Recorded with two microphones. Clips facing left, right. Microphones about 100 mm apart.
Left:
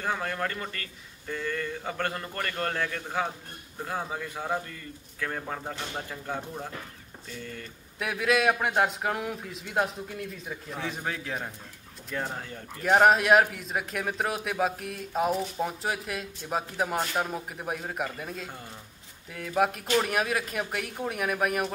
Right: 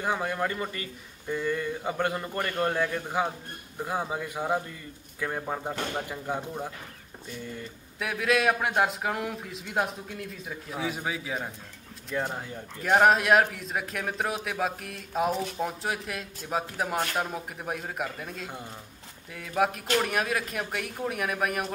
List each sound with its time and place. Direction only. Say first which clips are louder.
0.0 s a man's voice: right 2 dB; 15° right (ahead or behind)
8.0 s a man's voice: even; centre (ahead or behind)
12.8 s a man's voice: left 1 dB; centre (ahead or behind)